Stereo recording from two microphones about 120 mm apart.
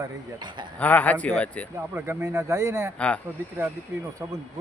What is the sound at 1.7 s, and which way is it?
Speech, 20° right (ahead or behind).